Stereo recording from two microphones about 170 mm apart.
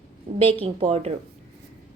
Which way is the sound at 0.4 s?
35° right (ahead or behind).